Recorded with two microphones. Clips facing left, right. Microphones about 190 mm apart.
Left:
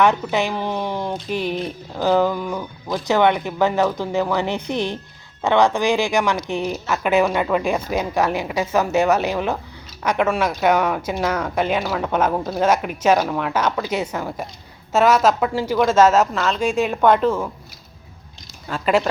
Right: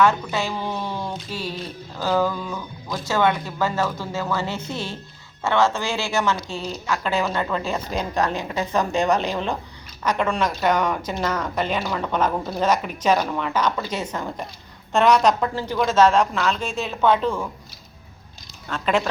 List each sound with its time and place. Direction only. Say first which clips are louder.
0.0 s a woman's voice: left 2 dB; 20° left (ahead or behind); by 16.6 s centre (ahead or behind)
16.6 s speech: left 6 dB; 15° left (ahead or behind)
18.7 s speech: left 3 dB; 5° left (ahead or behind)